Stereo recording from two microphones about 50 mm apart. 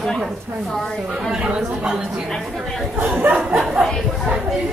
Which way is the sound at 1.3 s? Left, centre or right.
Centre.